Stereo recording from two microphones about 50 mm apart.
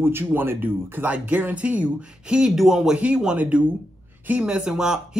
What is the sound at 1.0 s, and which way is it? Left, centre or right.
Speech, right.